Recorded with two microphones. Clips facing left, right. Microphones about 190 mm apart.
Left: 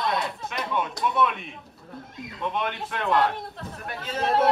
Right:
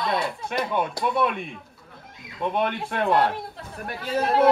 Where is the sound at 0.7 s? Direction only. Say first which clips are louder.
Even; 40° right (ahead or behind).